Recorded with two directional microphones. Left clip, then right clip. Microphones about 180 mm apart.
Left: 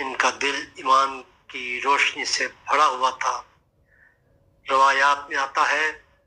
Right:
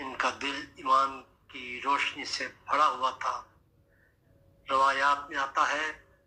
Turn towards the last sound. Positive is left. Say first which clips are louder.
# left 7 dB
turn(degrees=30)  # may be behind; listen again after turning